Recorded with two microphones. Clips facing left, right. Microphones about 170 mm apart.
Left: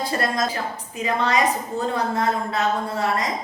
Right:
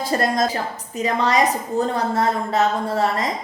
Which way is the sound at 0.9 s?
35° right (ahead or behind).